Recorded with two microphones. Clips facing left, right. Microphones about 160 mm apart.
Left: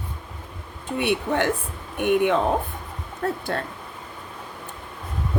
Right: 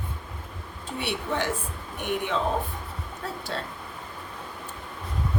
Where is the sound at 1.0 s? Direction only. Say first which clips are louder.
Left 6 dB; 55° left (ahead or behind).